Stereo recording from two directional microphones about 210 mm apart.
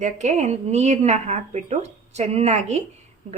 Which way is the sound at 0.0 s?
35° right (ahead or behind).